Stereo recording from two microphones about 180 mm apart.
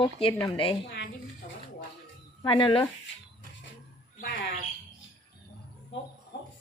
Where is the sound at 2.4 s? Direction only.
25° left (ahead or behind).